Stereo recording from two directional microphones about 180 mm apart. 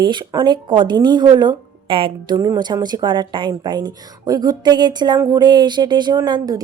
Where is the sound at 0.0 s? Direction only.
25° right (ahead or behind).